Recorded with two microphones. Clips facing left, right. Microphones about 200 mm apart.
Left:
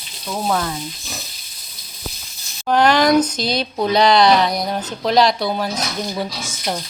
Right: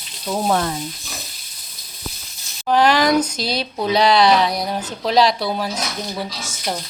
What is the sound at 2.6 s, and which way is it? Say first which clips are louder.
Speech: left 1 dB; 5° right (ahead or behind).